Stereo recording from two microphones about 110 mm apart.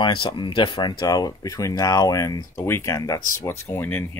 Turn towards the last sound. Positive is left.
turn(degrees=15)  # may be behind; listen again after turning